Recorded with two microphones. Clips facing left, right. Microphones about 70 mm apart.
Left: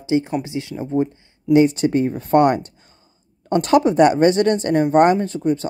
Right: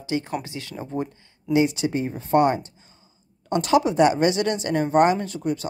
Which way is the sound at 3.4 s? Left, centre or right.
Left.